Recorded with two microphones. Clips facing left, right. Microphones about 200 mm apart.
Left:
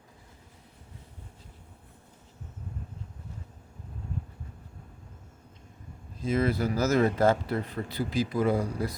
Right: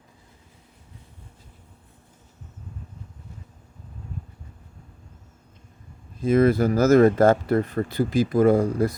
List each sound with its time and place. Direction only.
6.2 s speech: 50° right (ahead or behind)